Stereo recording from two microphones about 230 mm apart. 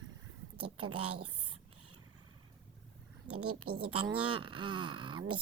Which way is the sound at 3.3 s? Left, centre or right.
Right.